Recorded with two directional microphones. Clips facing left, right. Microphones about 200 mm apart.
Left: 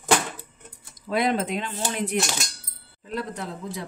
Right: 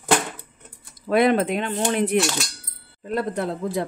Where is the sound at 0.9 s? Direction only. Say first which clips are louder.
Right 6 dB; 60° right (ahead or behind).